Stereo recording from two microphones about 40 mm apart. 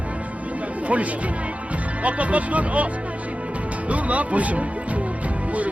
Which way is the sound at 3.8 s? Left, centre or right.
Right.